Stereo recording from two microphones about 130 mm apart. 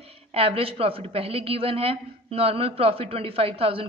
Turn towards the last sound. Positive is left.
turn(degrees=-50)  # may be behind; listen again after turning